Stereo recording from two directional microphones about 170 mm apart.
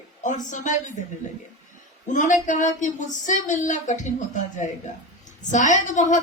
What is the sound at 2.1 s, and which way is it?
Speech, 45° left (ahead or behind).